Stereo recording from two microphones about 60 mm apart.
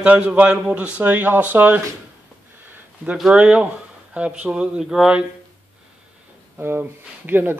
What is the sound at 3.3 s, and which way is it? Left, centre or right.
A man's voice, centre.